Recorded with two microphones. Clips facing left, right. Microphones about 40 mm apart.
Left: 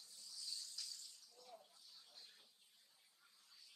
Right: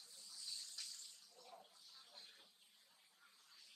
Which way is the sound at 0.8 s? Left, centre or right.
Right.